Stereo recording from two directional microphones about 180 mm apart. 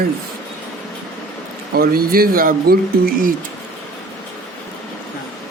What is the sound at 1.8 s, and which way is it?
Speech, 55° right (ahead or behind).